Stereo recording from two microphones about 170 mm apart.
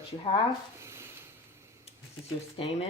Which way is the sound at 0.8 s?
15° right (ahead or behind).